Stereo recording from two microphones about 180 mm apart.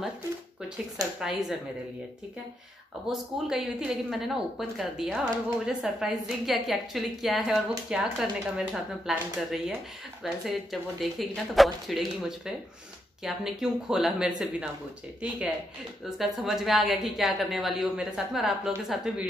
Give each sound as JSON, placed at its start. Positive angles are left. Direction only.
{"t": 1.2, "sound": "a woman's voice", "side_deg": 0}
{"t": 3.1, "sound": "a woman's voice", "side_deg": -5}
{"t": 16.2, "sound": "a woman's voice", "side_deg": 0}